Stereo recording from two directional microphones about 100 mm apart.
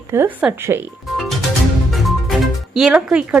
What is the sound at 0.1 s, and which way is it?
Speech, 25° right (ahead or behind).